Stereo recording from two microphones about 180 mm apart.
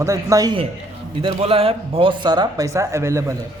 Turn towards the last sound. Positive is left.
turn(degrees=-15)  # may be behind; listen again after turning